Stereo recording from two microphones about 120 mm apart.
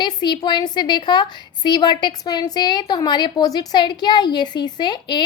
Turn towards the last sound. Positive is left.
turn(degrees=40)  # may be behind; listen again after turning